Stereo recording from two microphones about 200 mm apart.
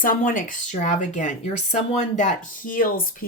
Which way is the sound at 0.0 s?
45° left (ahead or behind).